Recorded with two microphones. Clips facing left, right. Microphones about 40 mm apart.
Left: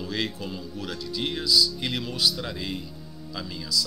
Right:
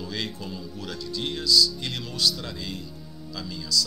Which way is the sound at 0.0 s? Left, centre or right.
Centre.